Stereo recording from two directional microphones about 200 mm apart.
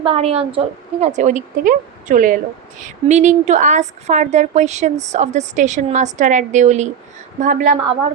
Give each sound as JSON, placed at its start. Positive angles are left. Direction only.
{"t": 0.0, "sound": "a woman's voice", "side_deg": -30}